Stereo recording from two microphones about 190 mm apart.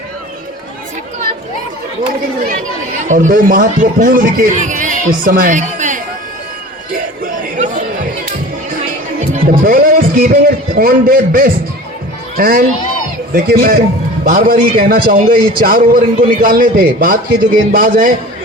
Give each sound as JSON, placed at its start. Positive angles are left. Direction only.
{"t": 3.0, "sound": "a man's voice", "side_deg": -40}
{"t": 7.5, "sound": "chatter", "side_deg": -40}
{"t": 9.3, "sound": "a man's voice", "side_deg": -50}